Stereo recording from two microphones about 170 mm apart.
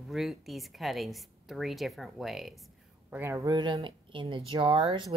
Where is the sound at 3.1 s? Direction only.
15° right (ahead or behind).